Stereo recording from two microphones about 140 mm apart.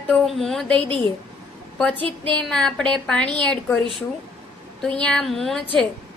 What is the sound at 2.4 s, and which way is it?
Speech, 5° left (ahead or behind).